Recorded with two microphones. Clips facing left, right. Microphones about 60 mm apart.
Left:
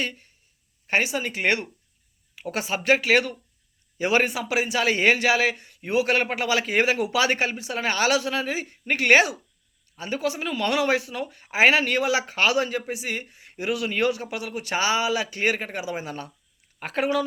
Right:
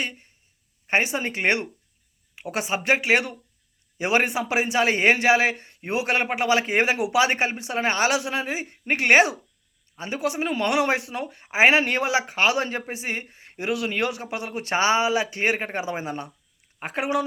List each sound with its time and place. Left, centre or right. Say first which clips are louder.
0.0 s a man's voice: left 1 dB; right